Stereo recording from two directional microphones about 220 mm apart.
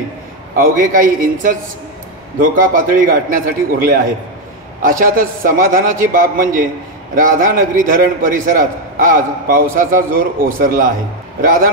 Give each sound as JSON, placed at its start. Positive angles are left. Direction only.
{"t": 0.6, "sound": "a man's voice", "side_deg": -40}